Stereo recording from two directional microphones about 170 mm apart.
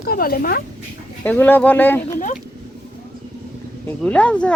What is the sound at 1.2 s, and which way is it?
Speech, 10° left (ahead or behind).